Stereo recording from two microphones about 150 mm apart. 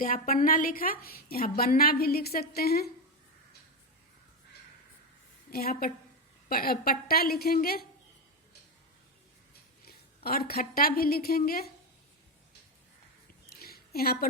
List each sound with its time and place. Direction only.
0.0 s a woman's voice: 70° left (ahead or behind); by 2.9 s 90° left
5.5 s a woman's voice: 85° left
9.8 s a woman's voice: 90° left
13.5 s a sound: 90° left